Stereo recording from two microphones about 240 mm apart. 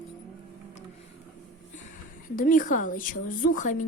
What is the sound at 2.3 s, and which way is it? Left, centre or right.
A woman's voice, left.